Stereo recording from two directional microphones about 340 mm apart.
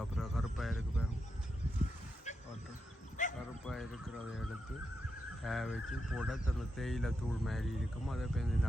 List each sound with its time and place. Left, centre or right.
0.0 s a sound: centre
3.2 s bow-wow: left
3.7 s music: centre
5.4 s speech: centre